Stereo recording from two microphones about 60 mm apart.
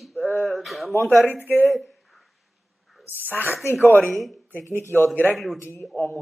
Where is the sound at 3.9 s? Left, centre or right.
Left.